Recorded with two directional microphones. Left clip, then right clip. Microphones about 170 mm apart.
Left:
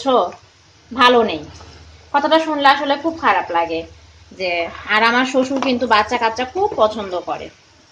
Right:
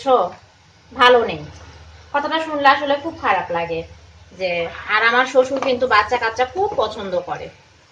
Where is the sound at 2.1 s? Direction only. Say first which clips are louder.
Left 5 dB; 50° left (ahead or behind).